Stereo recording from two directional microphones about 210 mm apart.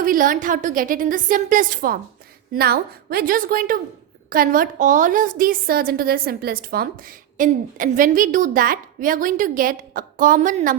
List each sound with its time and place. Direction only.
0.0 s a woman's voice: 40° right (ahead or behind)